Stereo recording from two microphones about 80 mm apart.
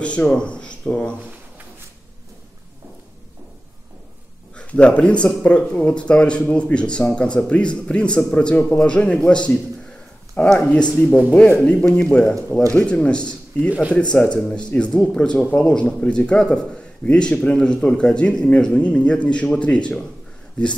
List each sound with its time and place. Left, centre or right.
0.0 s speech: centre
4.6 s speech: centre
13.7 s speech: centre
13.9 s speech: centre